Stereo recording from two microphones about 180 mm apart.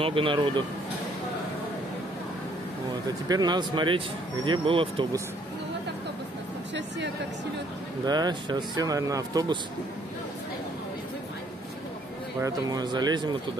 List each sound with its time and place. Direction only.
0.0 s speech: 30° right (ahead or behind)
3.3 s speech: 25° right (ahead or behind)
8.0 s speech: 20° right (ahead or behind)
12.4 s speech: 20° right (ahead or behind)